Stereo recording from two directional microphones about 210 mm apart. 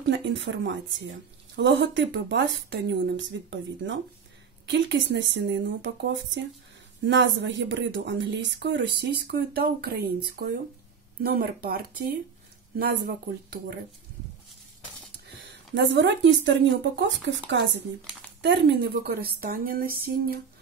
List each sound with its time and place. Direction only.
0.1 s speech: 60° right (ahead or behind)
7.1 s speech: 60° right (ahead or behind)
15.2 s speech: 60° right (ahead or behind)